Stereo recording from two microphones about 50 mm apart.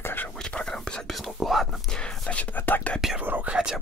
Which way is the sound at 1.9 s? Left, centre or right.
Centre.